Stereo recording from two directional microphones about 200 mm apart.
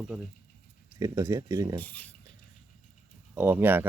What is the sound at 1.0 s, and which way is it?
Speech, 15° right (ahead or behind).